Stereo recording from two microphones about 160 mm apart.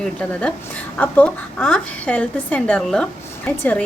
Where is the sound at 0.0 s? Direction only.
5° left (ahead or behind).